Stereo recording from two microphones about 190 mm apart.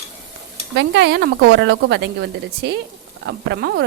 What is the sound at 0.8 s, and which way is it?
Speech, 70° right (ahead or behind).